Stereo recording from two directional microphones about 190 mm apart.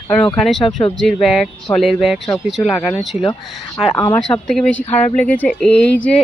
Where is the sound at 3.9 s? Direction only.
20° left (ahead or behind).